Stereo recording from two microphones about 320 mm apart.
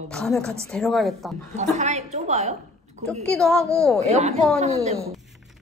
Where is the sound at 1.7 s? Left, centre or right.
Right.